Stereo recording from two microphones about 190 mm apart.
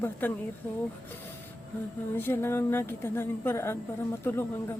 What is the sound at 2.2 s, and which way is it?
A woman's voice, 10° left (ahead or behind).